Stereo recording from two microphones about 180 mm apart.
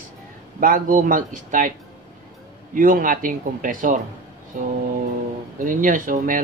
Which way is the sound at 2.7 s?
50° right (ahead or behind).